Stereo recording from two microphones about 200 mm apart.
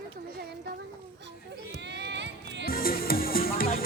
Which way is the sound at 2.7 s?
45° left (ahead or behind).